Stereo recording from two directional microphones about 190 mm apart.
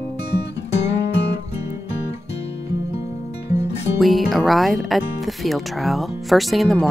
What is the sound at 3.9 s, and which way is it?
Speech, centre (ahead or behind).